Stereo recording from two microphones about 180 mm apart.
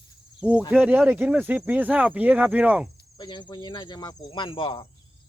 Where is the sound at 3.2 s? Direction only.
25° left (ahead or behind).